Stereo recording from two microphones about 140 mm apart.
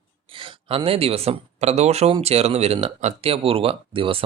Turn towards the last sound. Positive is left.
turn(degrees=-40)  # may be behind; listen again after turning